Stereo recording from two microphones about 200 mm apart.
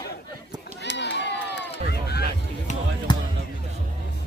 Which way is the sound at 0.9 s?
60° left (ahead or behind).